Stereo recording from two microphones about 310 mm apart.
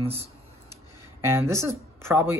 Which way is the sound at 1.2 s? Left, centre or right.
Centre.